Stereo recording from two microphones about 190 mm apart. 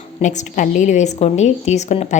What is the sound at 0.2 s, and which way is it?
A woman's voice, 40° left (ahead or behind).